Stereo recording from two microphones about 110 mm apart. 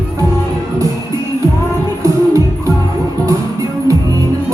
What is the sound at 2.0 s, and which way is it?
Music, 30° right (ahead or behind).